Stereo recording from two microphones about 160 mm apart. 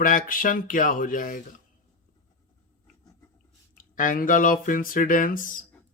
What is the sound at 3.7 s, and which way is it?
A man's voice, 55° left (ahead or behind).